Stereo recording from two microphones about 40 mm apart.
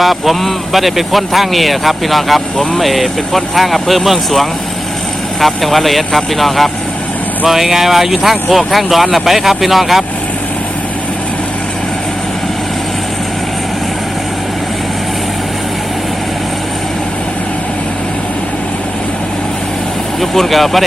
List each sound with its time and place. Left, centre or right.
0.0 s speech: centre
20.3 s speech: centre